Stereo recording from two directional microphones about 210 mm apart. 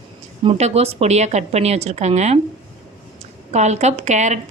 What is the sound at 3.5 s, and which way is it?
Speech, 35° right (ahead or behind).